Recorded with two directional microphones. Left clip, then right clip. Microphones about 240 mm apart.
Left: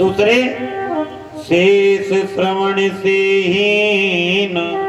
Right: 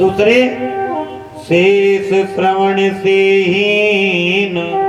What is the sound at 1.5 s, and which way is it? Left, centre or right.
A man's voice, left.